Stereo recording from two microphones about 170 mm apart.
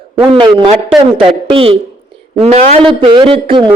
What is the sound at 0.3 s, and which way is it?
A man's voice, 30° right (ahead or behind).